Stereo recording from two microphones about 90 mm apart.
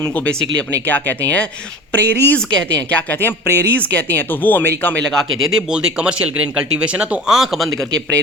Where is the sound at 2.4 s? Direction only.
10° left (ahead or behind).